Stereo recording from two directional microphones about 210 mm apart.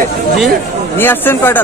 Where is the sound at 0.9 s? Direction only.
10° left (ahead or behind).